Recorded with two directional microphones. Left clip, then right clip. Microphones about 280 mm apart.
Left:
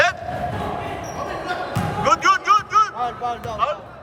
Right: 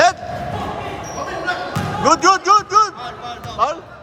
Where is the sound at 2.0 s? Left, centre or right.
Centre.